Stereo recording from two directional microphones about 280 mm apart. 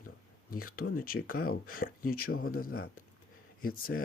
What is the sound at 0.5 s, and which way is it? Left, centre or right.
Speech, left.